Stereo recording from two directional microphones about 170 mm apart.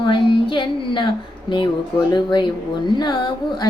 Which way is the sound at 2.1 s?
25° left (ahead or behind).